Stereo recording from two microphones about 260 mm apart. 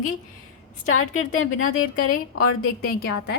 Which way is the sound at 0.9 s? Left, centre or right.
Left.